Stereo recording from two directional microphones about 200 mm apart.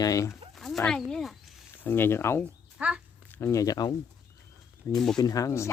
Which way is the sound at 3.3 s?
15° left (ahead or behind).